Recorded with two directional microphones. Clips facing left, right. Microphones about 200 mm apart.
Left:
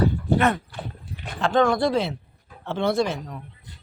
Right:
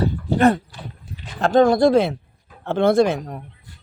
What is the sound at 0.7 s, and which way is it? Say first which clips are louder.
Livestock: left 2 dB; 60° left (ahead or behind).